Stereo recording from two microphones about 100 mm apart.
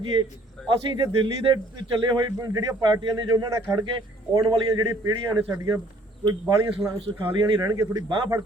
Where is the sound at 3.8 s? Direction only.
55° right (ahead or behind); by 6.7 s 40° right (ahead or behind).